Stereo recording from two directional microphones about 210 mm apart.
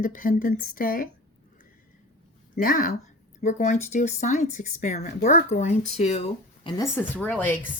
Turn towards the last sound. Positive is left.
turn(degrees=5)  # may be behind; listen again after turning